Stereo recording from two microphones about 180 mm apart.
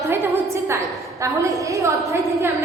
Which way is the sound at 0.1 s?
15° right (ahead or behind).